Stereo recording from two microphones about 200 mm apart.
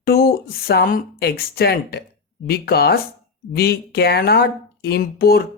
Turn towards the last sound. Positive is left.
turn(degrees=50)  # may be behind; listen again after turning